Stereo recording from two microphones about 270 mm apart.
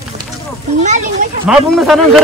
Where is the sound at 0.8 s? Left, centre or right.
Right.